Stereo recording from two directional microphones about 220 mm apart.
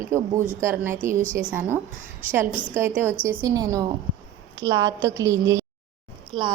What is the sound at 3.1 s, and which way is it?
Speech, 5° left (ahead or behind).